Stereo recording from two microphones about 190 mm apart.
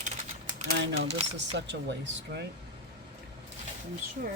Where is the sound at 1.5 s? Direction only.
65° right (ahead or behind).